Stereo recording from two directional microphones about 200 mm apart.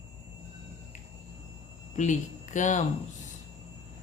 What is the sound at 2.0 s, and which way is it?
Speech, 40° left (ahead or behind).